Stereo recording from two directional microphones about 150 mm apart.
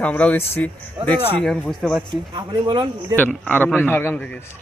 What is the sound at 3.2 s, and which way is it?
Speech, 10° left (ahead or behind).